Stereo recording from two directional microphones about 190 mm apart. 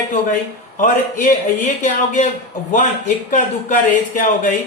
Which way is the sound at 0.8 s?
45° left (ahead or behind).